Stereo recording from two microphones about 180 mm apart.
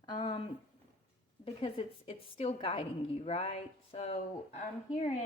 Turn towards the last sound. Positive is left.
turn(degrees=35)  # may be behind; listen again after turning